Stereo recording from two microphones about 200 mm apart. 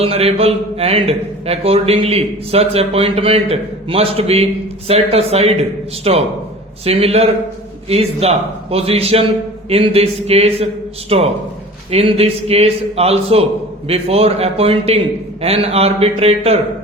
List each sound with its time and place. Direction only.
0.0 s a man's voice: 30° right (ahead or behind)